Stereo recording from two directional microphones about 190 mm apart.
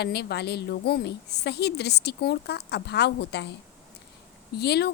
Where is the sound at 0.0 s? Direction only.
60° left (ahead or behind).